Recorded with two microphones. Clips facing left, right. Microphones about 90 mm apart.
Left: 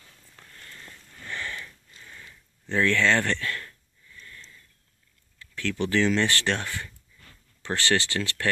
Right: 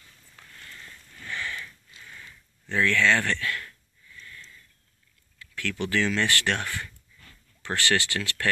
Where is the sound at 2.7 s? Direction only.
30° left (ahead or behind).